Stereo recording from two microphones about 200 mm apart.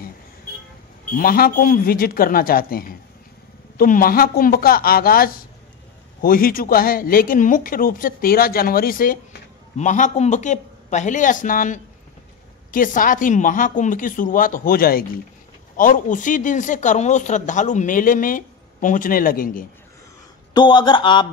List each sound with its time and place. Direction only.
1.1 s speech: 45° left (ahead or behind)
20.5 s a man's voice: 25° left (ahead or behind)